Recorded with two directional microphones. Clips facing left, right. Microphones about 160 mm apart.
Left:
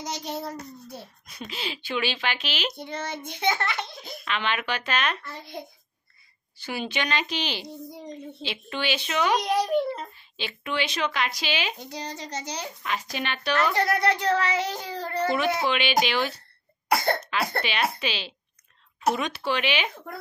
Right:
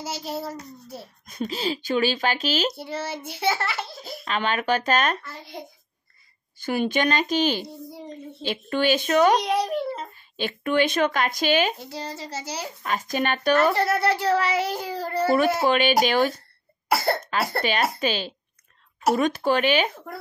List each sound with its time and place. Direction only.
0.0 s a child's voice: 5° right (ahead or behind)
1.2 s speech: 45° right (ahead or behind)
2.7 s a child's voice: 5° right (ahead or behind)
4.2 s speech: 40° right (ahead or behind)
6.6 s speech: 50° right (ahead or behind)
9.4 s a child's voice: centre (ahead or behind)
10.1 s speech: 45° right (ahead or behind)
11.8 s a child's voice: 5° right (ahead or behind)
12.8 s speech: 45° right (ahead or behind)
13.7 s a child's voice: 5° right (ahead or behind)
15.6 s speech: 45° right (ahead or behind)
16.9 s a child's voice: 5° right (ahead or behind)
17.2 s speech: 45° right (ahead or behind)